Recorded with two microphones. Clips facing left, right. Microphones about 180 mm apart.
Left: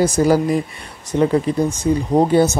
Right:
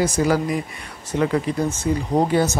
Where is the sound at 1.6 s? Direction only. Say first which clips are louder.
Left 4 dB; 15° left (ahead or behind).